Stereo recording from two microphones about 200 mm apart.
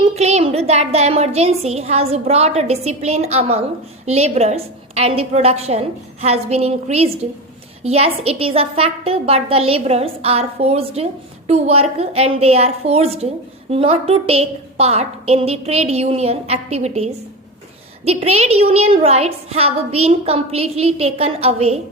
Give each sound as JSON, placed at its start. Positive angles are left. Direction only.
{"t": 0.2, "sound": "a woman's voice", "side_deg": -35}